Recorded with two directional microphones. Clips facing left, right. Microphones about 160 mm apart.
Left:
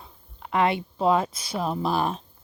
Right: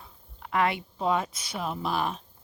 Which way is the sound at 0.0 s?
25° left (ahead or behind).